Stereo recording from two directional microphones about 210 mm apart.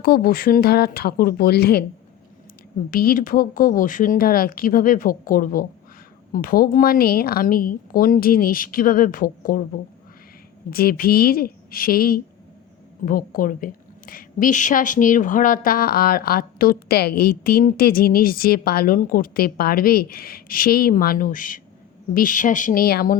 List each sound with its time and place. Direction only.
0.0 s a woman's voice: 45° left (ahead or behind)
2.9 s a woman's voice: 45° left (ahead or behind)
10.7 s a woman's voice: 45° left (ahead or behind)